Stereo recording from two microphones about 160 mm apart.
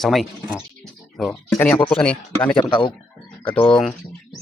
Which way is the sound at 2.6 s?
30° left (ahead or behind).